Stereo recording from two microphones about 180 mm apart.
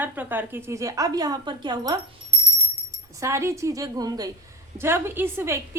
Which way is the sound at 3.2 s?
15° right (ahead or behind).